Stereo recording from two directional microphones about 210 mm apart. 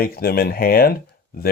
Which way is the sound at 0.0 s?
45° left (ahead or behind).